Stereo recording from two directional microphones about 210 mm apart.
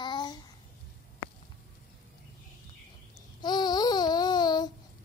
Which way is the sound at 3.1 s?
20° left (ahead or behind).